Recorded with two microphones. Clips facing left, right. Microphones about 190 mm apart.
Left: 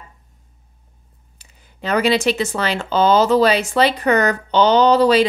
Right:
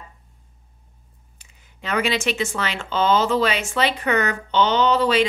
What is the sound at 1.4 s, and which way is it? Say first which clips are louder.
Speech: left 7 dB; 35° left (ahead or behind).